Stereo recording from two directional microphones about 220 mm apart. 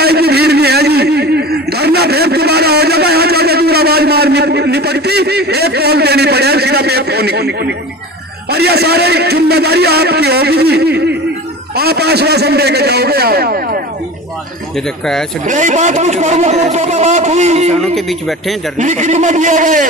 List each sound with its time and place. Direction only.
0.0 s a sound: 45° right (ahead or behind)
8.5 s a man's voice: 45° right (ahead or behind)
15.4 s speech: 35° right (ahead or behind)
17.9 s speech: centre (ahead or behind)
18.8 s speech: 35° right (ahead or behind)